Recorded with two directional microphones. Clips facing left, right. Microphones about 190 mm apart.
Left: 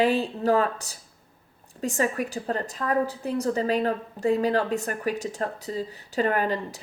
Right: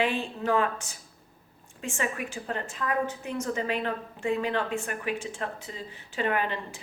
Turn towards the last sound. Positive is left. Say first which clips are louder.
# left 4 dB
turn(degrees=40)  # may be behind; listen again after turning